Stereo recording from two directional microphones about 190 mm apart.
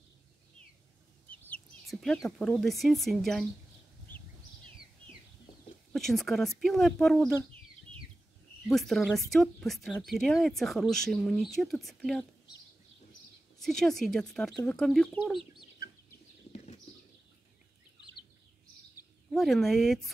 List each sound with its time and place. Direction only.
1.3 s speech: 5° left (ahead or behind)
5.9 s a woman's voice: centre (ahead or behind)
8.6 s a woman's voice: centre (ahead or behind)
13.6 s a woman's voice: centre (ahead or behind)
16.5 s a sound: 35° left (ahead or behind)
19.3 s a woman's voice: centre (ahead or behind)